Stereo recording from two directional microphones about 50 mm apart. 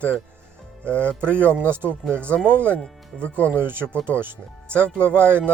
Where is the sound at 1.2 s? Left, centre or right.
Right.